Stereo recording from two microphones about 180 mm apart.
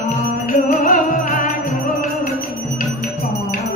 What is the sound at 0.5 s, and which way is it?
Music, 45° left (ahead or behind).